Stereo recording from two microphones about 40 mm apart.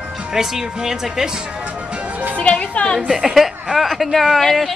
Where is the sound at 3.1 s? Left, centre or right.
Centre.